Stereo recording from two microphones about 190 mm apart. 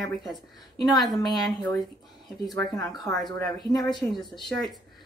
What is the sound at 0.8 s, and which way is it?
Speech, centre (ahead or behind).